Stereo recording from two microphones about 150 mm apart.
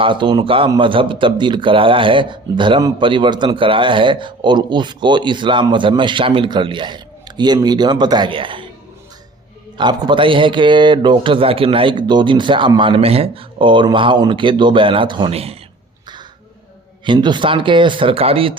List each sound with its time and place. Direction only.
0.0 s speech: 35° right (ahead or behind)
9.7 s speech: 30° right (ahead or behind)
17.1 s speech: 30° right (ahead or behind)